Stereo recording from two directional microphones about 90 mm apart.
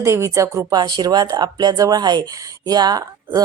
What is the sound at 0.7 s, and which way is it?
A woman's voice, 50° right (ahead or behind).